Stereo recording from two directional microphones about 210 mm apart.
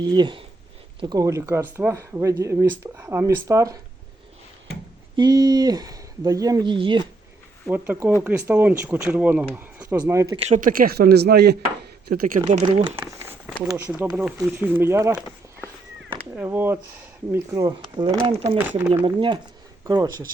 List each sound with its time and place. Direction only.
0.0 s speech: 20° right (ahead or behind)
5.1 s speech: 20° right (ahead or behind)
7.7 s speech: 10° right (ahead or behind)
10.3 s speech: 30° right (ahead or behind)
13.0 s a sound: 10° right (ahead or behind)
13.7 s speech: 10° right (ahead or behind)
16.3 s speech: 10° right (ahead or behind)